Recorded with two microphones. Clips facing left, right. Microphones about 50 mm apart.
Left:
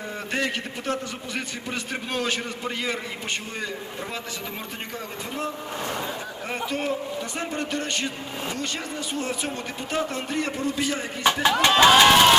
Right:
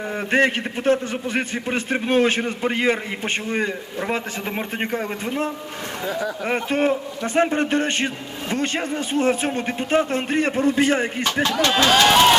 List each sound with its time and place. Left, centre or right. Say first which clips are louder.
0.3 s a man's voice: right 9 dB; right
6.5 s a man's voice: right 6 dB; right
11.4 s speech: left 1 dB; centre
11.9 s speech: even; centre